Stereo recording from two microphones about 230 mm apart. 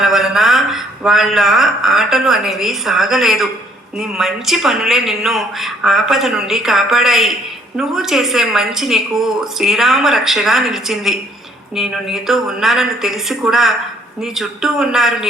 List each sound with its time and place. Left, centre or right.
0.0 s a woman's voice: centre